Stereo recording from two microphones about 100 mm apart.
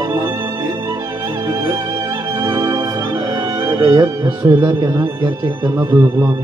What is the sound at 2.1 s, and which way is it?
Music, 30° right (ahead or behind).